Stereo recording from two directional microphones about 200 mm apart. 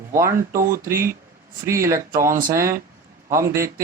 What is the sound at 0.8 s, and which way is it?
Speech, 15° right (ahead or behind).